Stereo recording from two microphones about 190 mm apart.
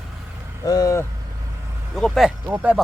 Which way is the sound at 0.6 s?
20° left (ahead or behind).